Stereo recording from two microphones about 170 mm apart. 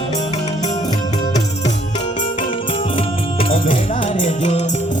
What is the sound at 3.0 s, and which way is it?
Music, 30° left (ahead or behind).